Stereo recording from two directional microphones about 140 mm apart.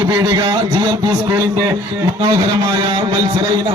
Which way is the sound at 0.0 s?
35° right (ahead or behind).